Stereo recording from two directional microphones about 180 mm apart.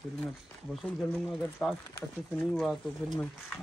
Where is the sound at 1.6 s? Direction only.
5° left (ahead or behind).